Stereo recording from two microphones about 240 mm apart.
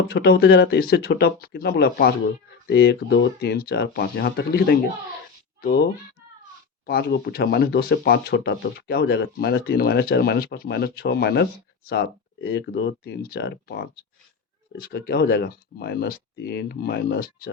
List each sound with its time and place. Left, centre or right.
0.1 s speech: left